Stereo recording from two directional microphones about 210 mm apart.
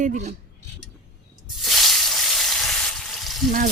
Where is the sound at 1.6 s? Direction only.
Centre (ahead or behind).